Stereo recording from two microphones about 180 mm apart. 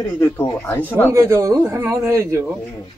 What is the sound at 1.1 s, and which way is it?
A man's voice, 15° right (ahead or behind).